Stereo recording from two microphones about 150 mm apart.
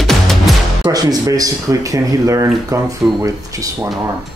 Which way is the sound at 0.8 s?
25° right (ahead or behind).